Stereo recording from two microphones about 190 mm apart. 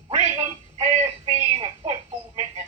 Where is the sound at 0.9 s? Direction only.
30° right (ahead or behind).